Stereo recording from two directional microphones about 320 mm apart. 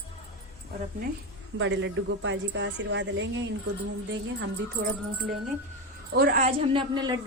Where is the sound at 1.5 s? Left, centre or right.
Right.